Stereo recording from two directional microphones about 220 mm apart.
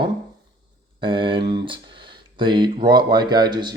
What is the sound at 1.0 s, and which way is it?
Speech, 20° right (ahead or behind).